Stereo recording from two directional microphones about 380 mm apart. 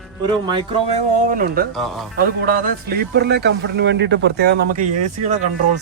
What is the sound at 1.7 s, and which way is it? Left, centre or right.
Speech, centre.